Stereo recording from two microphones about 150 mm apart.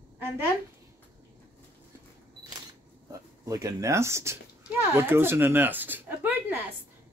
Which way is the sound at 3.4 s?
20° right (ahead or behind).